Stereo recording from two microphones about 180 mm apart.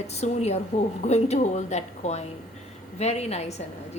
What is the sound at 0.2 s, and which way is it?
A woman's voice, 35° left (ahead or behind).